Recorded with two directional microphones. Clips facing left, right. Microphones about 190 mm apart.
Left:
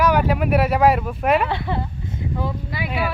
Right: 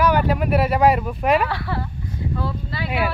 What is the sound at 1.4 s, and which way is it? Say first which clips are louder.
Speech: left 1 dB; 20° left (ahead or behind).